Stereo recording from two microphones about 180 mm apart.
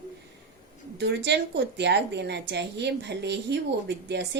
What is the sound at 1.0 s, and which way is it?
A woman's voice, 70° right (ahead or behind).